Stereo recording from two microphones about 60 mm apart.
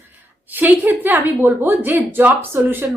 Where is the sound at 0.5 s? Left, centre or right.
Right.